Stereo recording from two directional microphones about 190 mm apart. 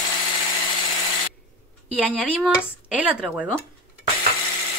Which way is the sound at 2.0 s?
5° right (ahead or behind).